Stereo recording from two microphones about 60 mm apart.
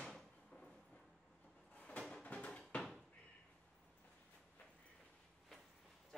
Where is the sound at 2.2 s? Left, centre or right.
Left.